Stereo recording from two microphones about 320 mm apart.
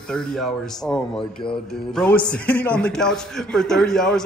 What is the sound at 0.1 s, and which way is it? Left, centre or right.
Speech, centre.